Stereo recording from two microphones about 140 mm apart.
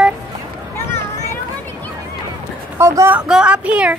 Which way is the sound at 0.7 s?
20° left (ahead or behind).